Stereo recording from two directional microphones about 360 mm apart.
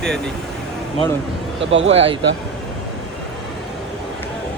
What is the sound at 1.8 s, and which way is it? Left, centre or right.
Speech, centre.